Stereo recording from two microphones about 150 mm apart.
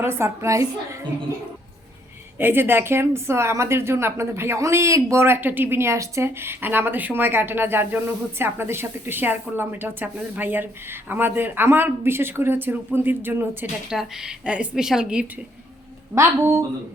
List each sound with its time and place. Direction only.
0.0 s a woman's voice: 15° right (ahead or behind)
2.4 s a woman's voice: 15° right (ahead or behind)
13.9 s a woman's voice: 5° right (ahead or behind)
16.1 s a woman's voice: 15° right (ahead or behind)